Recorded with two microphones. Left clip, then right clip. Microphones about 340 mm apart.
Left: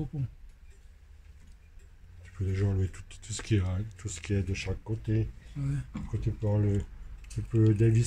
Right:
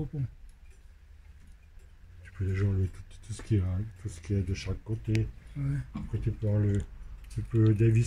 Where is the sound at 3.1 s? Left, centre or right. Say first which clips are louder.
Left 3 dB; left.